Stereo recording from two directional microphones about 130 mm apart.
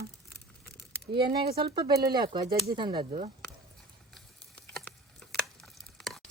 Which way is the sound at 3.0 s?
55° right (ahead or behind).